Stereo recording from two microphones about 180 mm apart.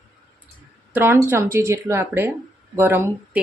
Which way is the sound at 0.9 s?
15° right (ahead or behind).